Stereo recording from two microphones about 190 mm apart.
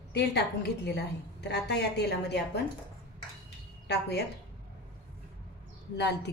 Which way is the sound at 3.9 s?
60° left (ahead or behind).